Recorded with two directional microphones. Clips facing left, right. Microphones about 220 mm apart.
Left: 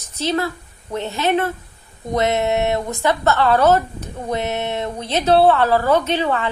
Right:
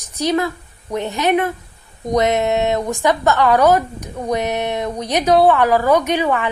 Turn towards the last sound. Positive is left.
turn(degrees=-15)  # may be behind; listen again after turning